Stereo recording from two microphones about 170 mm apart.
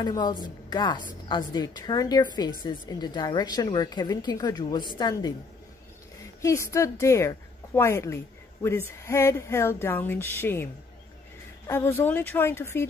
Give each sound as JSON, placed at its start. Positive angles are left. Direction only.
{"t": 0.0, "sound": "a woman's voice", "side_deg": 25}
{"t": 6.4, "sound": "speech", "side_deg": 15}